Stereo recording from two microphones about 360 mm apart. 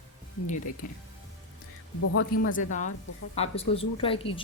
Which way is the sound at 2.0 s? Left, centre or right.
Left.